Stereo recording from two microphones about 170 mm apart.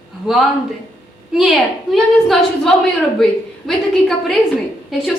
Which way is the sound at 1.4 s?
Centre (ahead or behind).